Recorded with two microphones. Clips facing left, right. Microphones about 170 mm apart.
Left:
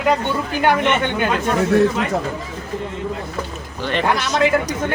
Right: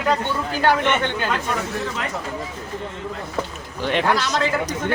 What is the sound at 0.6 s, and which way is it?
Speech, 15° left (ahead or behind).